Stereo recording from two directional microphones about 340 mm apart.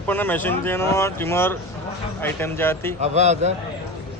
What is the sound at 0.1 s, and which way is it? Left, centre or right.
Speech, centre.